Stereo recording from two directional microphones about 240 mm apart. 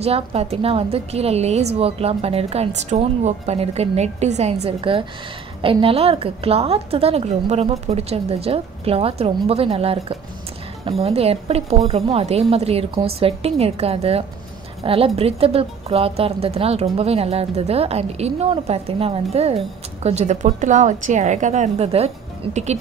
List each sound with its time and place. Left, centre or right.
0.0 s a woman's voice: right